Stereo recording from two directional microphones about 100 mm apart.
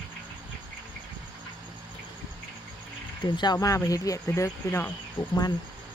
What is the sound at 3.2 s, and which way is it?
Speech, 45° left (ahead or behind).